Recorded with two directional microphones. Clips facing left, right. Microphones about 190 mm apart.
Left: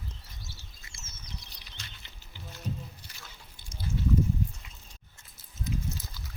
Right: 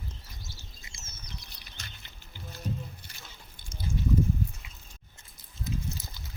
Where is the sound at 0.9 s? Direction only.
15° right (ahead or behind).